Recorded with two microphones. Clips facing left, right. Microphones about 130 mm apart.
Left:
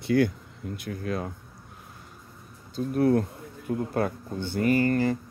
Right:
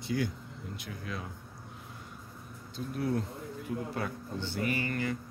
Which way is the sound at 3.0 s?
60° left (ahead or behind).